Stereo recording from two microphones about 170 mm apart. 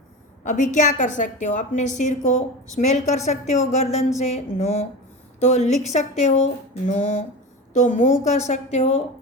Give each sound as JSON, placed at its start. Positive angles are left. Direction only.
{"t": 0.4, "sound": "a woman's voice", "side_deg": 50}